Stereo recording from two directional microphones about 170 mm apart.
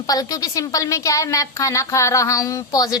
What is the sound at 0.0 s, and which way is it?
A woman's voice, 20° left (ahead or behind).